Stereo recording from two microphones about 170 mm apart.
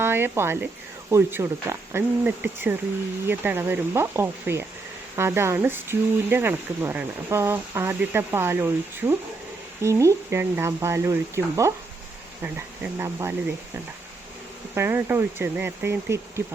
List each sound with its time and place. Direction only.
0.0 s speech: 15° right (ahead or behind)
14.8 s speech: 15° right (ahead or behind)